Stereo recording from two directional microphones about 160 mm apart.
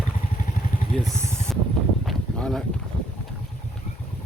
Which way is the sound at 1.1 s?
15° right (ahead or behind).